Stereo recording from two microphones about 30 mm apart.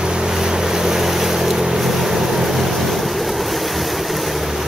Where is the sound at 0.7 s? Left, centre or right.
Centre.